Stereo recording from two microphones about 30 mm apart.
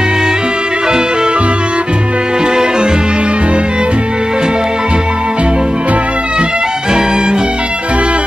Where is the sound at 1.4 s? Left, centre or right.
Right.